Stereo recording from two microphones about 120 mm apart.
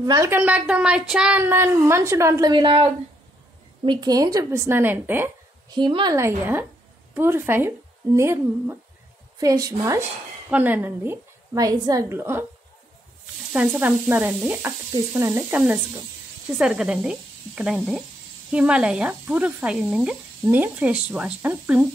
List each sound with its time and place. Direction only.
0.0 s a woman's voice: 30° right (ahead or behind)
0.3 s a woman's voice: 15° right (ahead or behind)
2.5 s a woman's voice: 45° right (ahead or behind); by 5.3 s 20° right (ahead or behind)
5.8 s a woman's voice: 40° right (ahead or behind)
6.1 s a woman's voice: 20° right (ahead or behind)
10.5 s a woman's voice: 15° right (ahead or behind)
11.5 s a woman's voice: 30° right (ahead or behind)
13.5 s a woman's voice: 10° right (ahead or behind)